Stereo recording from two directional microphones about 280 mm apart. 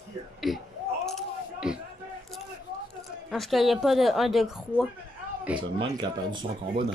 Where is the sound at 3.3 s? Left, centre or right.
Centre.